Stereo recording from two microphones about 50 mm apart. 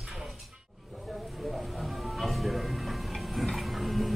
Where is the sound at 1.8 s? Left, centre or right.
Centre.